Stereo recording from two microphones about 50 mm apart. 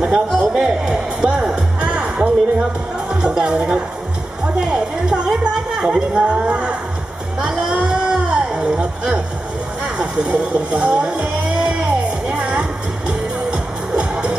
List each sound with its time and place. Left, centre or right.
0.1 s music: centre
2.0 s music: centre
3.1 s speech: centre
4.6 s a sound: centre
5.9 s speech: right
7.3 s a sound: centre
9.9 s speech: centre
11.1 s music: centre